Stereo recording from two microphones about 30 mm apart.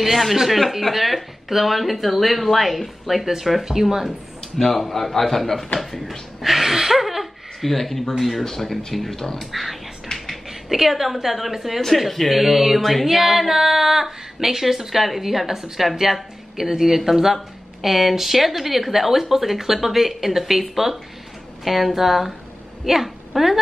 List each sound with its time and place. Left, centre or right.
0.0 s speech: centre
4.4 s a sound: centre
4.7 s speech: centre
6.4 s a sound: centre
7.7 s speech: centre
8.5 s speech: centre
9.4 s speech: centre
10.1 s a sound: centre
10.5 s a woman's voice: centre